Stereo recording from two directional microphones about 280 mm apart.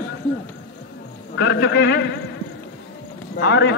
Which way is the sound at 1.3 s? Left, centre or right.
Left.